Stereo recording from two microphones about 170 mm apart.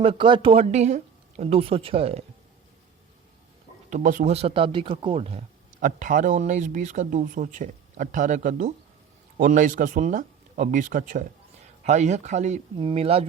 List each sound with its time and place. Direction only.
0.0 s speech: 30° right (ahead or behind)
3.8 s speech: 50° right (ahead or behind)
5.8 s speech: 50° right (ahead or behind)